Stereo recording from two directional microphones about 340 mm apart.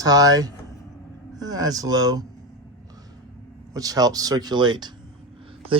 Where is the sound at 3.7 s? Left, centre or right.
Centre.